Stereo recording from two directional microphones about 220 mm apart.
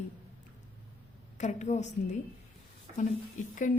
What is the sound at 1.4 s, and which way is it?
Speech, 35° left (ahead or behind).